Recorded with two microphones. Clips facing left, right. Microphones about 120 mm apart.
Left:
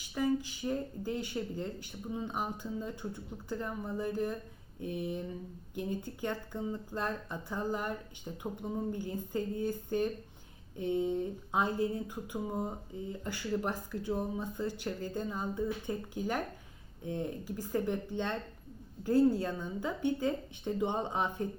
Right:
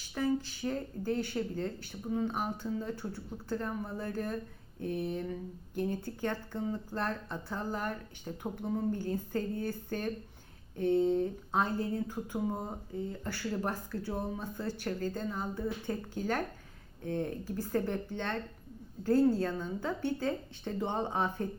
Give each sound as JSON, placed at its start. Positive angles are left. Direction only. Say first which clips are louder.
{"t": 0.0, "sound": "speech", "louder": "even", "side_deg": 15}